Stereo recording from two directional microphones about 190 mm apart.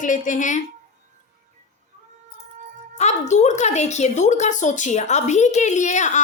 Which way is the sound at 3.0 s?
35° left (ahead or behind).